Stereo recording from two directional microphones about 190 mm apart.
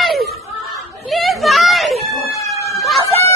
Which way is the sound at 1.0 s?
Centre (ahead or behind).